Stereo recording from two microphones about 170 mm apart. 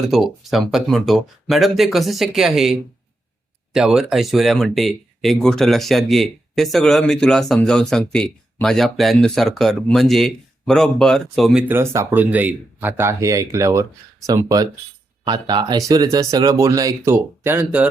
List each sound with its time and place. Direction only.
0.1 s speech: centre (ahead or behind)
11.7 s speech: 15° right (ahead or behind)